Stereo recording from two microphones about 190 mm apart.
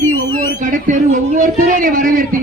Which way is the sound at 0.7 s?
45° right (ahead or behind).